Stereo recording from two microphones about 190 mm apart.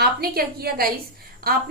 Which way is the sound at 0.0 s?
55° right (ahead or behind).